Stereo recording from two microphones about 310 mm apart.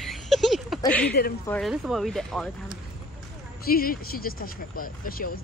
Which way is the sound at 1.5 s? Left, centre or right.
Centre.